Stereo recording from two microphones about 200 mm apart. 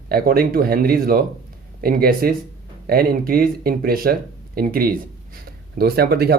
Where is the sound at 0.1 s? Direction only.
50° right (ahead or behind).